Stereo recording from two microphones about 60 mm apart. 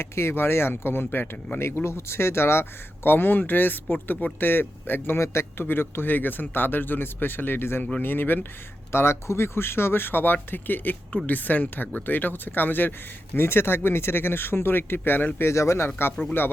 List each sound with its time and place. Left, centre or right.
0.0 s speech: left
5.2 s speech: left
7.8 s speech: left
8.0 s speech: left
8.9 s speech: left
15.4 s speech: left
16.2 s speech: left